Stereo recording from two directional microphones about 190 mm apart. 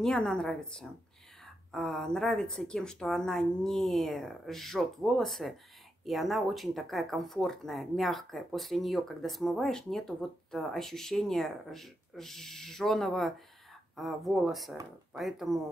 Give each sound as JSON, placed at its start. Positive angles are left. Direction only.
{"t": 0.0, "sound": "speech", "side_deg": 5}